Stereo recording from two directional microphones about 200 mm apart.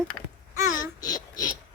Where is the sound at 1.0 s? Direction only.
20° left (ahead or behind).